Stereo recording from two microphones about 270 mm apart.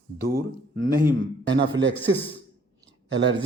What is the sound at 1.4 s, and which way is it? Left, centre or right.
Speech, right.